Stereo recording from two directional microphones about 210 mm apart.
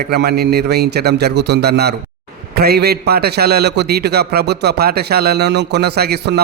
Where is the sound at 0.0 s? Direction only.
50° right (ahead or behind).